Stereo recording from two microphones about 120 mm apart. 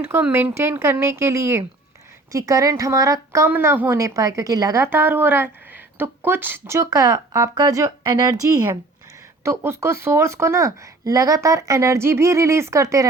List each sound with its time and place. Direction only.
0.1 s speech: 15° right (ahead or behind)